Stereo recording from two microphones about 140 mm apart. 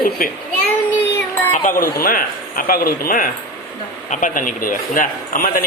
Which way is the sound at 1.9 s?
90° left.